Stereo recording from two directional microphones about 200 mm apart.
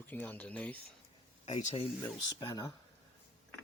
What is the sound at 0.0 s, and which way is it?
Speech, 10° left (ahead or behind).